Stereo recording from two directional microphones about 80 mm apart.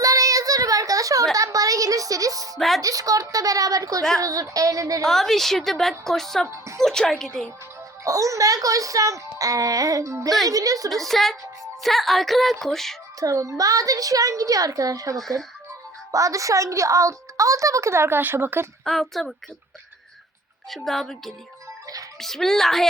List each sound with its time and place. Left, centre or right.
0.0 s a sound: right
2.6 s a woman's voice: centre
2.8 s speech: right
5.0 s a woman's voice: centre
6.5 s speech: right
6.8 s a woman's voice: centre
8.0 s speech: right
11.0 s a woman's voice: centre
13.1 s a woman's voice: right
18.9 s a woman's voice: centre
20.7 s a woman's voice: centre